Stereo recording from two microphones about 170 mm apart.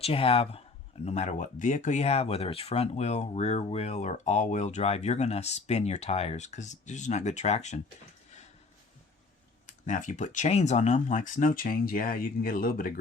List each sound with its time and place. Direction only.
0.0 s speech: 35° left (ahead or behind)
9.8 s speech: 45° left (ahead or behind)